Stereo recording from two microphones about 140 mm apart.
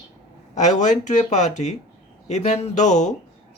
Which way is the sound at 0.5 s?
60° left (ahead or behind).